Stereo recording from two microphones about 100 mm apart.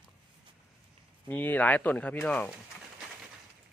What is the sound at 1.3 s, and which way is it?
Speech, 20° left (ahead or behind).